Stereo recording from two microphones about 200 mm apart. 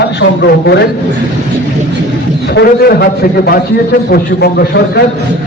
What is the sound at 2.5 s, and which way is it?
A man's voice, 50° left (ahead or behind).